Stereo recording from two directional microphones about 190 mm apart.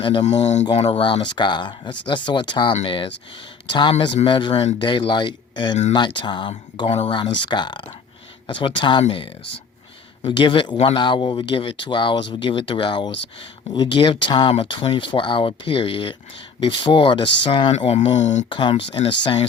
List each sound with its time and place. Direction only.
0.0 s speech: 25° left (ahead or behind)
18.4 s speech: 25° left (ahead or behind)